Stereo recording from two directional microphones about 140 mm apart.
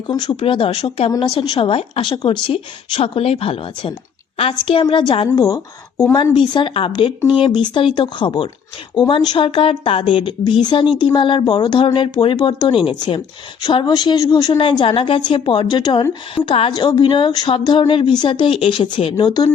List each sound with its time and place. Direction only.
0.1 s speech: 30° left (ahead or behind)
6.3 s speech: 35° left (ahead or behind)